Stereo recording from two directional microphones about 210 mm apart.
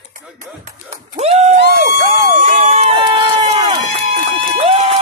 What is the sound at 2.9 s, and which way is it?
Run, 25° right (ahead or behind).